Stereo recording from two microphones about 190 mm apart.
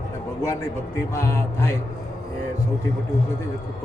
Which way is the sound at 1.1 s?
15° left (ahead or behind).